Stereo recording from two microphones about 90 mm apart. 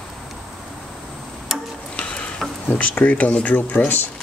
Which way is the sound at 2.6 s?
20° left (ahead or behind).